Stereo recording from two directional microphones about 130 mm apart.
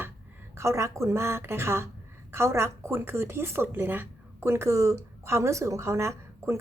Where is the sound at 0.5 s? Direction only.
20° right (ahead or behind).